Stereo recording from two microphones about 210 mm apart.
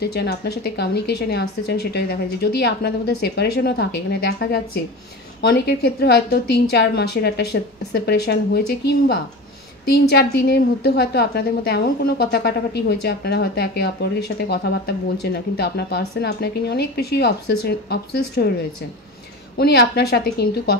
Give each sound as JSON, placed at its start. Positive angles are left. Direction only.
{"t": 0.0, "sound": "a woman's voice", "side_deg": 50}
{"t": 19.6, "sound": "a woman's voice", "side_deg": 50}